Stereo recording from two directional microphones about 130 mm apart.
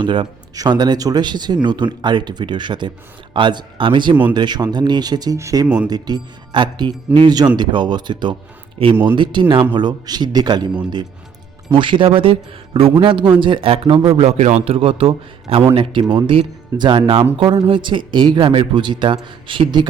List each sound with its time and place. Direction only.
0.0 s speech: 40° right (ahead or behind)
5.6 s speech: 10° right (ahead or behind)
5.9 s a man's voice: 30° right (ahead or behind)
11.7 s speech: 40° right (ahead or behind)
14.2 s a man's voice: 55° right (ahead or behind); by 19.9 s 35° right (ahead or behind)